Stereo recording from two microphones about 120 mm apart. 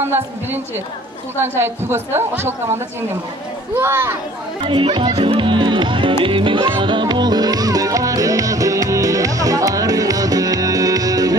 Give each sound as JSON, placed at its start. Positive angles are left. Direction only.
{"t": 0.0, "sound": "a woman's voice", "side_deg": -20}
{"t": 4.6, "sound": "speech", "side_deg": -45}
{"t": 6.2, "sound": "music", "side_deg": -45}